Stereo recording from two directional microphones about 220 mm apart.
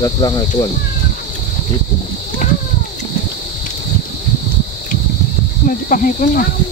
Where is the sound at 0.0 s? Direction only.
20° left (ahead or behind).